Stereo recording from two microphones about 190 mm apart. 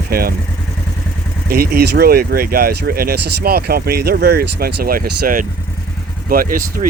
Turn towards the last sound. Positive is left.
turn(degrees=-45)  # may be behind; listen again after turning